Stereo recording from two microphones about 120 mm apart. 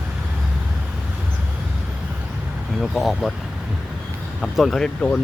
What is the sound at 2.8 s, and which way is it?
Speech, centre (ahead or behind).